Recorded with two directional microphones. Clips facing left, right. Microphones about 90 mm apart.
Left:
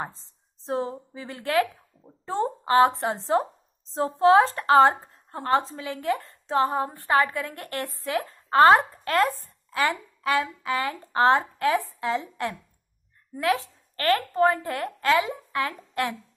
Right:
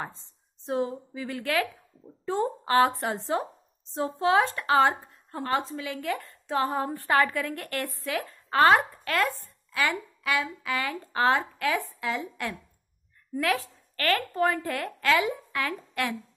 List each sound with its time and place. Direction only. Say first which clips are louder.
0.7 s a woman's voice: even; 30° left (ahead or behind)